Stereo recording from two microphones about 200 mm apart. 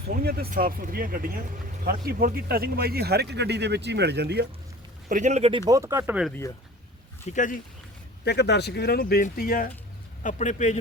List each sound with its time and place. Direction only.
0.1 s speech: 50° right (ahead or behind)
5.0 s speech: 40° right (ahead or behind); by 6.2 s 10° right (ahead or behind)
6.2 s speech: 10° left (ahead or behind)
7.3 s a man's voice: 40° left (ahead or behind)
8.2 s a man's voice: 55° left (ahead or behind); by 10.8 s 35° left (ahead or behind)